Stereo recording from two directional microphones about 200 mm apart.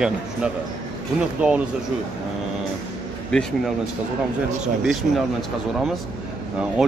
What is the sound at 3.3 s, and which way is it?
Speech, 5° left (ahead or behind).